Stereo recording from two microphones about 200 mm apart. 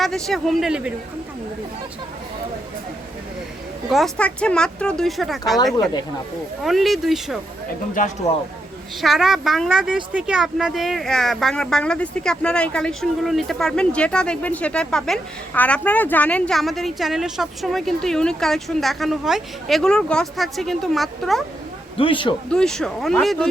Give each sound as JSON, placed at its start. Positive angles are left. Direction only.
{"t": 0.0, "sound": "speech", "side_deg": 0}
{"t": 3.8, "sound": "speech", "side_deg": 0}
{"t": 6.6, "sound": "speech", "side_deg": 0}
{"t": 9.0, "sound": "speech", "side_deg": 0}
{"t": 21.9, "sound": "a man's voice", "side_deg": 25}
{"t": 22.4, "sound": "speech", "side_deg": 5}